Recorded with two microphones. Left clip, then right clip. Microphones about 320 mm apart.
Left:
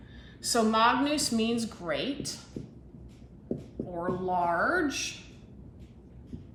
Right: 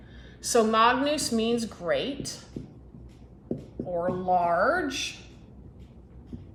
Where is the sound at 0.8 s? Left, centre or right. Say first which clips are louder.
Right 2 dB; centre.